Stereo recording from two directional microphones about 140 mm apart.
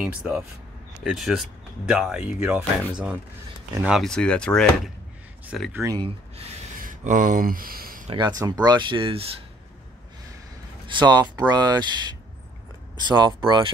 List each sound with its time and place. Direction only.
0.2 s speech: 10° right (ahead or behind)
3.8 s speech: centre (ahead or behind)
5.7 s speech: 20° right (ahead or behind)
6.8 s a sound: 75° right (ahead or behind); by 8.0 s 90° right
8.1 s speech: 30° right (ahead or behind)
10.9 s speech: 30° right (ahead or behind)